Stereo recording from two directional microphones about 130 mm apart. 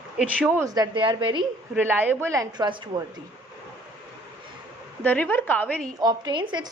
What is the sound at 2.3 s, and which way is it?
Speech, 30° right (ahead or behind).